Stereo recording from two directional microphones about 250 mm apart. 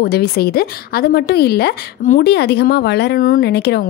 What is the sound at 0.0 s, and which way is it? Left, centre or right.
A woman's voice, left.